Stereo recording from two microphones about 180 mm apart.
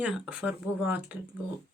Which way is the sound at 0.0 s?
5° right (ahead or behind).